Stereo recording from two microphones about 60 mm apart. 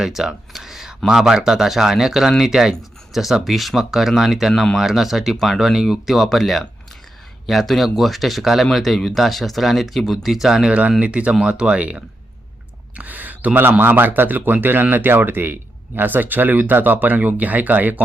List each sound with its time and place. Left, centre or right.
0.0 s speech: centre; by 18.0 s right